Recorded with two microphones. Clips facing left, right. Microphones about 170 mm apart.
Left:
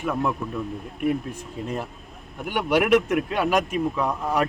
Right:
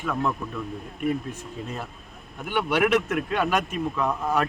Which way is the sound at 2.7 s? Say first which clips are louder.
Left 4 dB; 10° left (ahead or behind).